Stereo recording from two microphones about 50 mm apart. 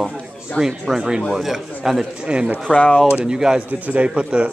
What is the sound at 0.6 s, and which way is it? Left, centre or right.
A man's voice, centre.